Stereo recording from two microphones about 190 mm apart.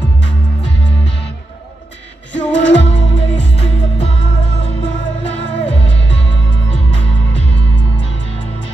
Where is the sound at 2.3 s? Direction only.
70° left (ahead or behind).